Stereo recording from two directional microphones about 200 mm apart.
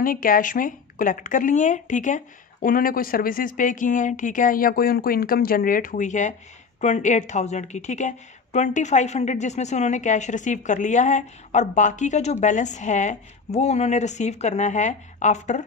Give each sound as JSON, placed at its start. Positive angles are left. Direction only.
{"t": 0.0, "sound": "a woman's voice", "side_deg": 45}